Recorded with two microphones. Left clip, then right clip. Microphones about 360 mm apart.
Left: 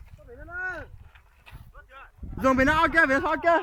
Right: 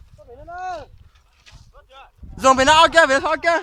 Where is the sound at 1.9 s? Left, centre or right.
Centre.